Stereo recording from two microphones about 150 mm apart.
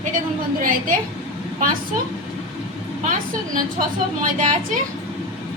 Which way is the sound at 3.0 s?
60° right (ahead or behind).